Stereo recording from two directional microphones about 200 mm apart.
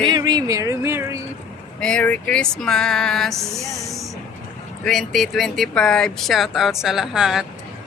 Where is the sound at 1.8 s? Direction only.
5° left (ahead or behind).